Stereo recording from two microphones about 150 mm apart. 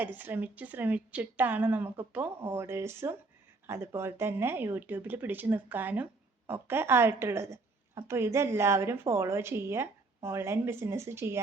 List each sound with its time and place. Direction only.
0.0 s a woman's voice: 10° right (ahead or behind)